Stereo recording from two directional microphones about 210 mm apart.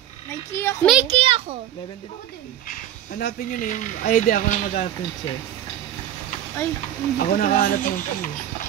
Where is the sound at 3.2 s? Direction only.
40° left (ahead or behind).